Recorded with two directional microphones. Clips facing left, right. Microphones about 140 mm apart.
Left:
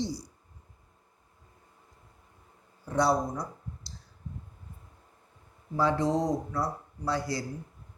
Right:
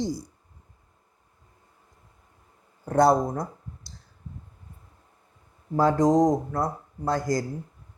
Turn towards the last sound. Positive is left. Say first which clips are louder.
# right 5 dB
turn(degrees=-45)  # may be behind; listen again after turning